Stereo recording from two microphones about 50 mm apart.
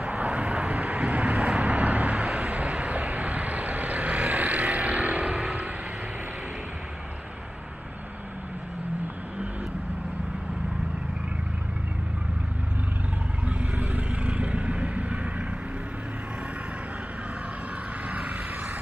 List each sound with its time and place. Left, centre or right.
0.0 s vehicle: right
1.4 s vehicle: centre
1.7 s vehicle: right
5.3 s vehicle: centre
13.5 s vehicle: right
18.0 s vehicle: right